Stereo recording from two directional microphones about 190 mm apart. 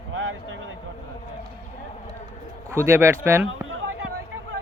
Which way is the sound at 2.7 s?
10° right (ahead or behind).